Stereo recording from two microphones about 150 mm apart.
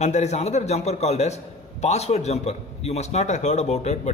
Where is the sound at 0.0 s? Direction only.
50° left (ahead or behind).